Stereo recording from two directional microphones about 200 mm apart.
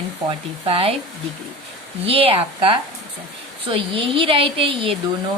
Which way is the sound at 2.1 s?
30° right (ahead or behind).